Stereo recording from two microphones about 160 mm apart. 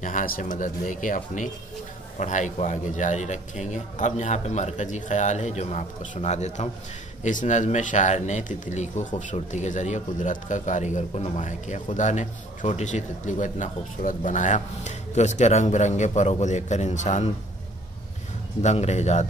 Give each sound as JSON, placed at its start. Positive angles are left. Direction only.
{"t": 0.0, "sound": "speech", "side_deg": 55}
{"t": 18.6, "sound": "speech", "side_deg": 45}